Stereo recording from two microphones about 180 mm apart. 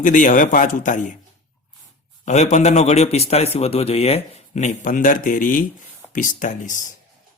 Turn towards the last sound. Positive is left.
turn(degrees=45)  # may be behind; listen again after turning